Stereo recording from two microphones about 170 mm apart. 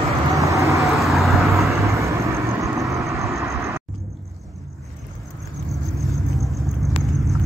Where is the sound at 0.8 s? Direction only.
Centre (ahead or behind).